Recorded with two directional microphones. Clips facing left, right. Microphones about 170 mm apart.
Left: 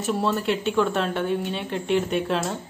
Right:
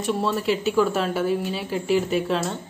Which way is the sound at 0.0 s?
Centre (ahead or behind).